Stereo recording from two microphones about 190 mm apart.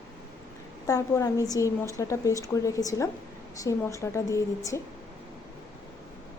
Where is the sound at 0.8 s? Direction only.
15° left (ahead or behind).